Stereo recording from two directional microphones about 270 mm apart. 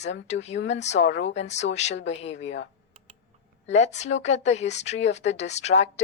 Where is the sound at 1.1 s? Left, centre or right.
Left.